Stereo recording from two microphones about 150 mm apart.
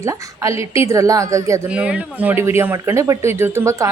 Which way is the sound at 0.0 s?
20° right (ahead or behind).